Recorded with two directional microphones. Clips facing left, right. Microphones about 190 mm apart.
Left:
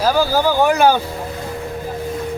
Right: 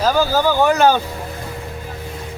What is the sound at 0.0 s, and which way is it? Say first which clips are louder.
A man's voice: even; 10° left (ahead or behind).